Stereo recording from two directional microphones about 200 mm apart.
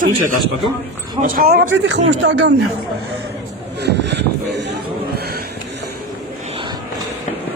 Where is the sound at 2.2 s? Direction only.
65° right (ahead or behind).